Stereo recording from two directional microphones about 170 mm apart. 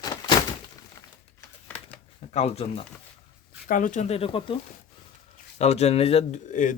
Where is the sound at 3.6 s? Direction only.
50° left (ahead or behind).